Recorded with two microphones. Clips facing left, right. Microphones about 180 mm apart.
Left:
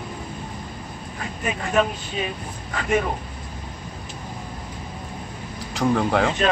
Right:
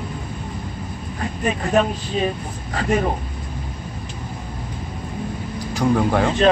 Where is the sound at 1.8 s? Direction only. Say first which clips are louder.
Right 2 dB; 35° right (ahead or behind).